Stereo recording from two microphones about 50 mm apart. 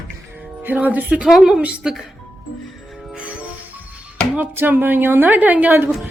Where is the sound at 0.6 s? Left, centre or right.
Right.